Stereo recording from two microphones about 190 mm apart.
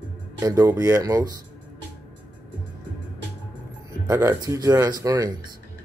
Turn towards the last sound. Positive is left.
turn(degrees=-20)  # may be behind; listen again after turning